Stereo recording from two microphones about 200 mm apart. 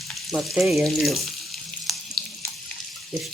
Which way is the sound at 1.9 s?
Centre (ahead or behind).